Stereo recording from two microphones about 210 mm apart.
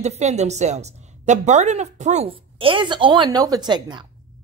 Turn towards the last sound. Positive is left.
turn(degrees=-20)  # may be behind; listen again after turning